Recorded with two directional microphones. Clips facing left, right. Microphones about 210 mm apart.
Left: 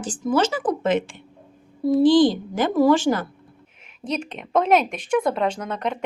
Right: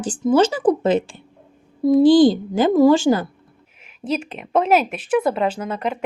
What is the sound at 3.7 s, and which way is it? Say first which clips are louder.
A woman's voice: right 4 dB; 5° right (ahead or behind).